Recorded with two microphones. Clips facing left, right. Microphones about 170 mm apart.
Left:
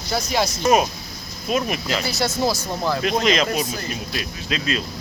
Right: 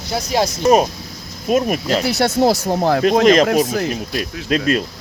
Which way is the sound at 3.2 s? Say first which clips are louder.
Right 8 dB; 50° right (ahead or behind).